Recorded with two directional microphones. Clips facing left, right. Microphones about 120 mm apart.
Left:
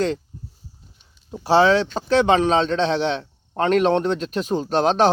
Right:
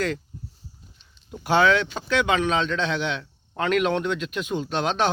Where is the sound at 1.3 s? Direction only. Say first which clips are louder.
Left 4 dB; 30° left (ahead or behind).